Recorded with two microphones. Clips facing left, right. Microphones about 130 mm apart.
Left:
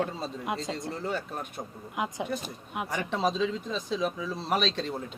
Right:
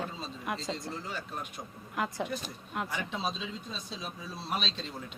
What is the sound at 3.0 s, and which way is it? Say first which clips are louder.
Speech: left 8 dB; 80° left.